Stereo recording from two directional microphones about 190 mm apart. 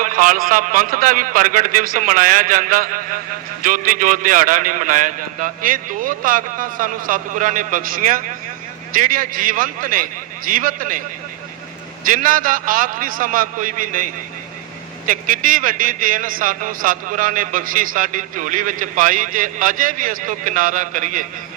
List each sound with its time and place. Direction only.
0.0 s a man's voice: 45° right (ahead or behind)
12.0 s a man's voice: 45° right (ahead or behind)